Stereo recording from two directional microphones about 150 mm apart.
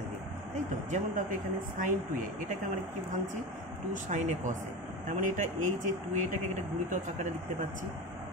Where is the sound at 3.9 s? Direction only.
55° right (ahead or behind).